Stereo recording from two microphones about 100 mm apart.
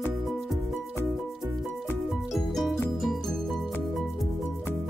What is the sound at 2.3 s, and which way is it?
Music, centre (ahead or behind).